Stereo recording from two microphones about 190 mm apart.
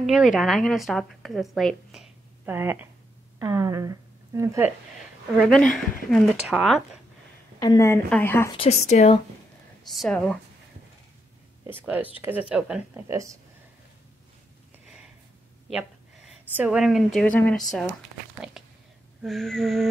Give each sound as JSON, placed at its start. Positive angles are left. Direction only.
{"t": 0.0, "sound": "a woman's voice", "side_deg": 0}
{"t": 5.5, "sound": "speech", "side_deg": 0}
{"t": 7.5, "sound": "a woman's voice", "side_deg": 15}
{"t": 8.5, "sound": "speech", "side_deg": 35}
{"t": 9.8, "sound": "speech", "side_deg": 0}
{"t": 11.6, "sound": "speech", "side_deg": -10}
{"t": 16.5, "sound": "speech", "side_deg": -5}
{"t": 18.6, "sound": "a sound", "side_deg": 0}
{"t": 19.2, "sound": "speech", "side_deg": 0}